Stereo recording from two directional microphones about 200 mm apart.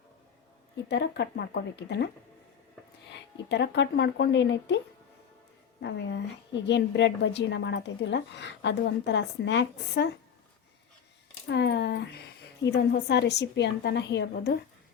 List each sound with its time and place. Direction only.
0.9 s a woman's voice: 55° left (ahead or behind)
3.1 s a woman's voice: 60° left (ahead or behind)
5.8 s a woman's voice: 60° left (ahead or behind)
11.4 s a woman's voice: 60° left (ahead or behind)